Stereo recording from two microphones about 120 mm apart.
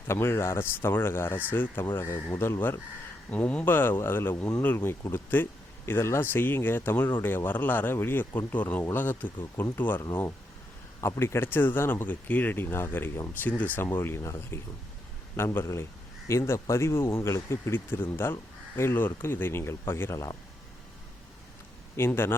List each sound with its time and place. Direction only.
0.1 s speech: 20° left (ahead or behind)
21.9 s speech: 20° left (ahead or behind)